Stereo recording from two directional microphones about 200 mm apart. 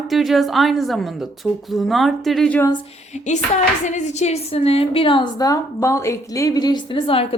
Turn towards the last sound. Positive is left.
turn(degrees=30)  # may be behind; listen again after turning